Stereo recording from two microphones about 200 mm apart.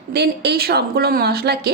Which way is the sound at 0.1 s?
55° right (ahead or behind).